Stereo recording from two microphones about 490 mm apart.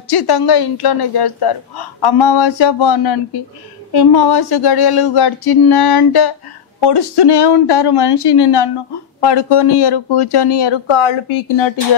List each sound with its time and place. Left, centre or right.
0.1 s speech: left
2.1 s a sound: left
3.9 s speech: left